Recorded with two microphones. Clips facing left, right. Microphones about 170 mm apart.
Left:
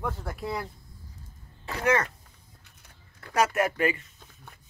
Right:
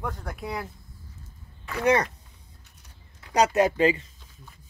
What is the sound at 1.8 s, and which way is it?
Speech, 15° right (ahead or behind).